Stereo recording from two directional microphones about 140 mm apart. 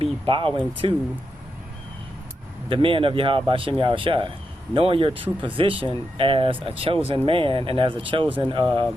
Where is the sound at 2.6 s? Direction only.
40° right (ahead or behind).